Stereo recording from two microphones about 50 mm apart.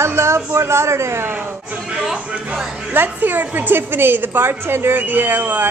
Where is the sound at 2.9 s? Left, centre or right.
Right.